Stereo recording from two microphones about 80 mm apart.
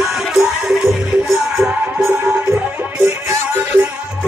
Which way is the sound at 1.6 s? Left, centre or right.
Centre.